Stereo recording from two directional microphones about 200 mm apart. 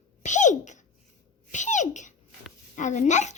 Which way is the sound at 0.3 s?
40° left (ahead or behind).